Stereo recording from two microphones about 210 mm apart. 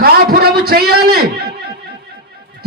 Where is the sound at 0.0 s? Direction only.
45° right (ahead or behind).